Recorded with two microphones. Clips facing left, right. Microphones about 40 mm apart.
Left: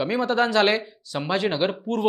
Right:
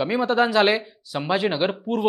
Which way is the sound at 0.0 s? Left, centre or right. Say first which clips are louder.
Right 2 dB; centre.